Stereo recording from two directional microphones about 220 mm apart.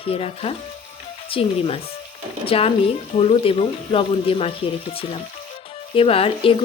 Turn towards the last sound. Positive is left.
turn(degrees=25)  # may be behind; listen again after turning